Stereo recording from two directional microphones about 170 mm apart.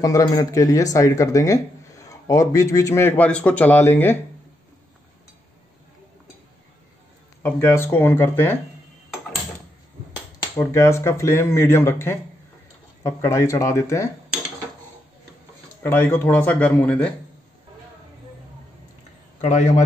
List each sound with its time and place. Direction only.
0.0 s speech: 20° left (ahead or behind)
7.4 s speech: 15° left (ahead or behind)
10.6 s speech: 15° left (ahead or behind)
15.8 s speech: 15° left (ahead or behind)